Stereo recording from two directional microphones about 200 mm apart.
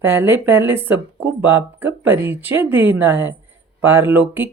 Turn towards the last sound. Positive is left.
turn(degrees=-10)  # may be behind; listen again after turning